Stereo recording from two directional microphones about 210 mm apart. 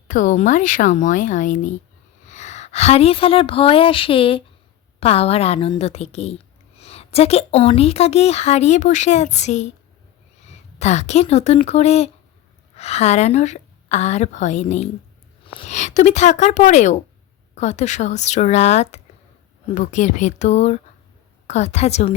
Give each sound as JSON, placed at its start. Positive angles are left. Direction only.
{"t": 0.1, "sound": "a woman's voice", "side_deg": 35}